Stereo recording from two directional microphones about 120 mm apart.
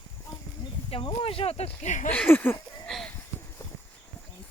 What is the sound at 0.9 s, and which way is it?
Speech, 45° left (ahead or behind).